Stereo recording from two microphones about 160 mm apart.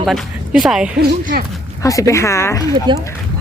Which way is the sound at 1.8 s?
20° left (ahead or behind).